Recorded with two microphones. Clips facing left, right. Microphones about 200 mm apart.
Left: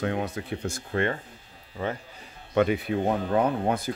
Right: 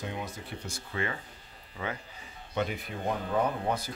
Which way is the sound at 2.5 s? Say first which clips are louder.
Left 10 dB; 70° left (ahead or behind).